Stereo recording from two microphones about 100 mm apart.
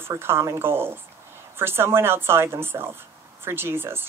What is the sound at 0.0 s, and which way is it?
Speech, 25° right (ahead or behind).